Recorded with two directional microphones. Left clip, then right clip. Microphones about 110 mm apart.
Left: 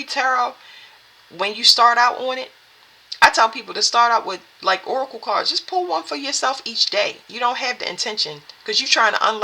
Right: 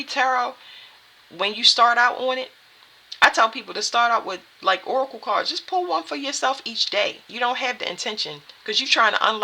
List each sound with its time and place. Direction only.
0.0 s speech: 30° right (ahead or behind)